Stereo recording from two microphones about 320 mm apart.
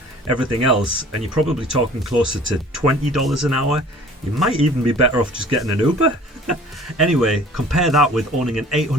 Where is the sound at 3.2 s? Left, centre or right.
Centre.